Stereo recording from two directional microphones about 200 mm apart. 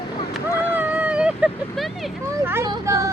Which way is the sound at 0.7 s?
10° right (ahead or behind).